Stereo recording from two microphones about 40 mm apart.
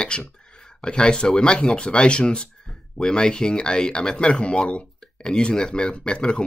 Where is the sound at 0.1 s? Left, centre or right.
Left.